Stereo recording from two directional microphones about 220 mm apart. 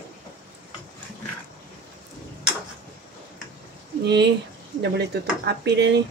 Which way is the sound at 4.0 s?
50° right (ahead or behind).